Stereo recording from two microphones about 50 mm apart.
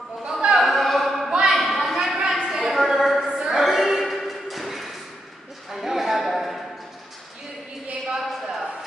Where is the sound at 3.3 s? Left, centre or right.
Centre.